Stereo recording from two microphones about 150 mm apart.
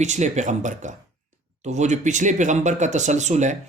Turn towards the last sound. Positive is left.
turn(degrees=-50)  # may be behind; listen again after turning